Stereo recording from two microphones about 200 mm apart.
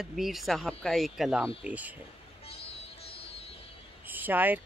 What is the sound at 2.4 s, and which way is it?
Music, 30° left (ahead or behind).